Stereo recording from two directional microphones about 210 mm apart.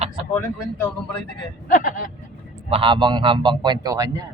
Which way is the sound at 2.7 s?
25° right (ahead or behind).